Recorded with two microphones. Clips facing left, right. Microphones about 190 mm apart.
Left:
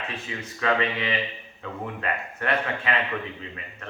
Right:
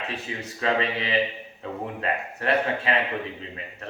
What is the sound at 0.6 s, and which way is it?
A man's voice, 30° right (ahead or behind).